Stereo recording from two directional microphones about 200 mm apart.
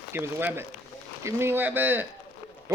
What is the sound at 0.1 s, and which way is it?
Speech, 10° right (ahead or behind).